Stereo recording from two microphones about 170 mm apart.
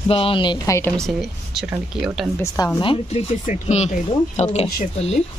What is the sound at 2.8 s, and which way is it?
Speech, 30° left (ahead or behind).